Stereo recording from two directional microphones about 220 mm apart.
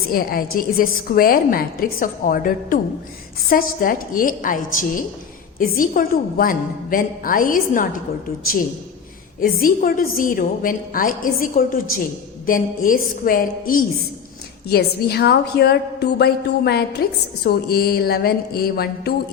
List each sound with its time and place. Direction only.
0.1 s a woman's voice: 40° left (ahead or behind)
9.4 s a woman's voice: 40° left (ahead or behind)